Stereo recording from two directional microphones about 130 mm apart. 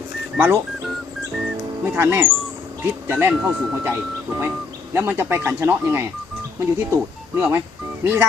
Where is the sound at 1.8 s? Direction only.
20° right (ahead or behind).